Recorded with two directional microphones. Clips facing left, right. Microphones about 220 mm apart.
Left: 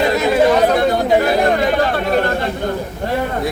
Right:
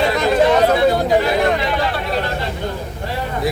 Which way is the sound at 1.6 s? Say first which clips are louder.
Left 5 dB; 45° left (ahead or behind).